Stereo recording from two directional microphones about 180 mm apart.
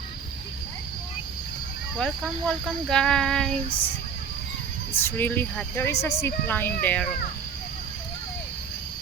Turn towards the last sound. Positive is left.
turn(degrees=10)  # may be behind; listen again after turning